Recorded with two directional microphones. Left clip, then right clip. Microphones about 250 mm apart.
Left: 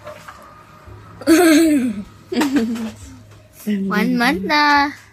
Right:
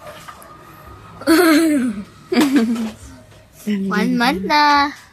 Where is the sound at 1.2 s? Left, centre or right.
Centre.